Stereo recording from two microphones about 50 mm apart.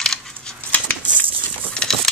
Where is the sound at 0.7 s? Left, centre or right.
Left.